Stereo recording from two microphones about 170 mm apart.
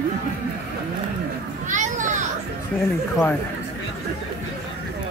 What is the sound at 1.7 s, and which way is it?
Children playing, 45° right (ahead or behind).